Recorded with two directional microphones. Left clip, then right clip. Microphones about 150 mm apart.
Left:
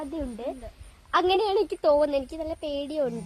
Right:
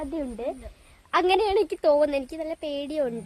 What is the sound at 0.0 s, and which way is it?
A woman's voice, 25° right (ahead or behind).